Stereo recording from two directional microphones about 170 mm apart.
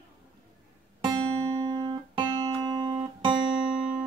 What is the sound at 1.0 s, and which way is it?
Music, 25° right (ahead or behind).